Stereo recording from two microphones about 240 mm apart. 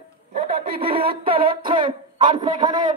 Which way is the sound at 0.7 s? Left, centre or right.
Right.